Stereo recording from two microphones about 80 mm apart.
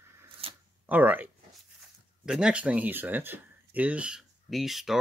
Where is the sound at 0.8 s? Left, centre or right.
Right.